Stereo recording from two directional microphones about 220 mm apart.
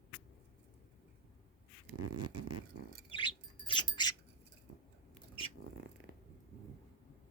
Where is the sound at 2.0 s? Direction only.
90° right.